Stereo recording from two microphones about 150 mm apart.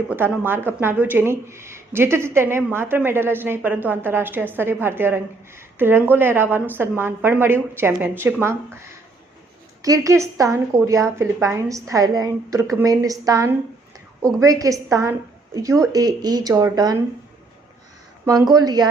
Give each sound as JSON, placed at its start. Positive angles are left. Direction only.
{"t": 0.1, "sound": "a woman's voice", "side_deg": -15}
{"t": 18.3, "sound": "a woman's voice", "side_deg": -25}